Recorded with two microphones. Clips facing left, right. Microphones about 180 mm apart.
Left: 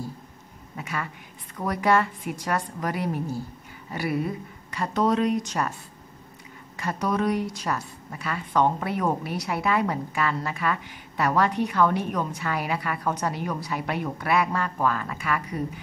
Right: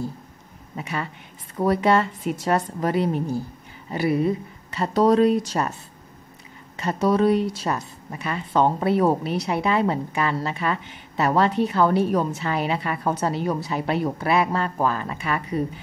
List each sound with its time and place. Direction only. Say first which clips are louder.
0.7 s a woman's voice: right 3 dB; 25° right (ahead or behind)
6.8 s a woman's voice: right 6 dB; 25° right (ahead or behind)